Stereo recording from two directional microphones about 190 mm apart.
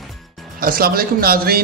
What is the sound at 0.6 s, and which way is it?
Speech, 50° right (ahead or behind).